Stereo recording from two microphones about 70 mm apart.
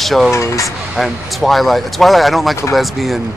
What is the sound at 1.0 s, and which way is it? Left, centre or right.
Speech, centre.